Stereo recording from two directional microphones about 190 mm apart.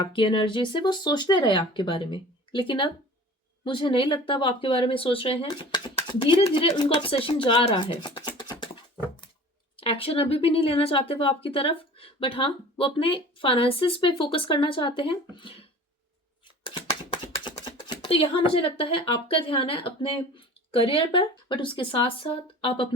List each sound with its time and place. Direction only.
0.0 s speech: 25° left (ahead or behind)
9.7 s speech: 30° left (ahead or behind)
17.7 s speech: 30° left (ahead or behind)